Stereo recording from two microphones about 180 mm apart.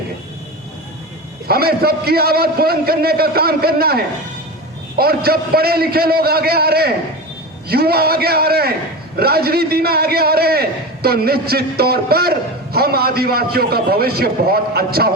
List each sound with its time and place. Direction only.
1.5 s a man's voice: 60° right (ahead or behind)